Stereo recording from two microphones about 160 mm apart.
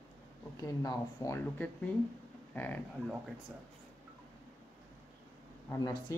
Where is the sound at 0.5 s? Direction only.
20° left (ahead or behind).